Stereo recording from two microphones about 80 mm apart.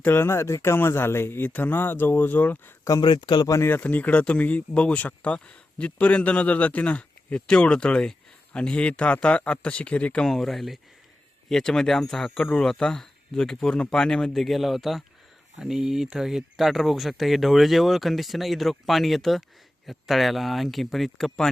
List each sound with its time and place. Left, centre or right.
0.0 s speech: left
3.0 s a man's voice: left
3.7 s speech: left
10.2 s speech: centre